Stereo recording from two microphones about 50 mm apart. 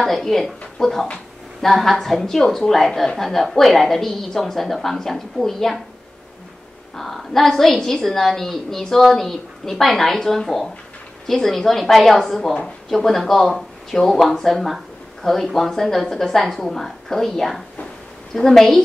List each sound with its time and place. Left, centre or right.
0.0 s a woman's voice: centre
7.0 s a woman's voice: centre